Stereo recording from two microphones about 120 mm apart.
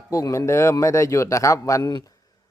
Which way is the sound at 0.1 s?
25° left (ahead or behind).